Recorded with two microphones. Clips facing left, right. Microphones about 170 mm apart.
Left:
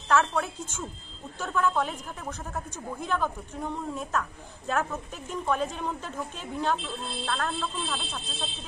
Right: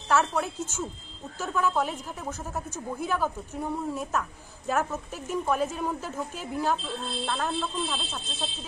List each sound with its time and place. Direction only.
0.1 s a woman's voice: 5° right (ahead or behind)